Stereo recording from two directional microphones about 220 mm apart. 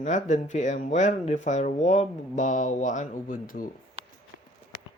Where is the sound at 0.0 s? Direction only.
35° left (ahead or behind).